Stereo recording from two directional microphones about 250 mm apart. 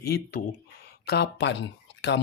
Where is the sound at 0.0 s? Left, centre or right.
Left.